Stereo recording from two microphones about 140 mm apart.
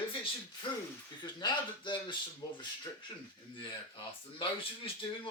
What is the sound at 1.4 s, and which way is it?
Speech, 35° left (ahead or behind).